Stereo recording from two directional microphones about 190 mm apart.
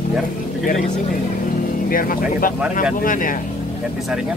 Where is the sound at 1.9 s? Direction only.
50° left (ahead or behind).